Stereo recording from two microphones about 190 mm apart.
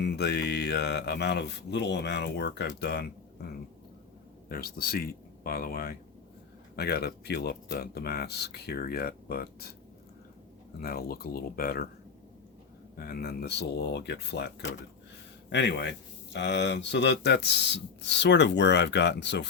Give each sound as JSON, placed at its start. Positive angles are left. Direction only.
{"t": 0.0, "sound": "speech", "side_deg": 60}
{"t": 10.8, "sound": "speech", "side_deg": 55}
{"t": 13.0, "sound": "speech", "side_deg": 55}